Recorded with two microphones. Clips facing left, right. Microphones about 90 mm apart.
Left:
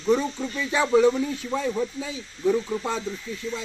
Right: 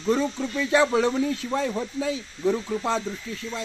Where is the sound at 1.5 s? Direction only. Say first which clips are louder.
Even; 80° right.